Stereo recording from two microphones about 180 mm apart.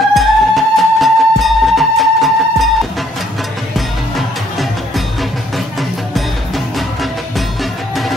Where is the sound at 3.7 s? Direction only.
Centre (ahead or behind).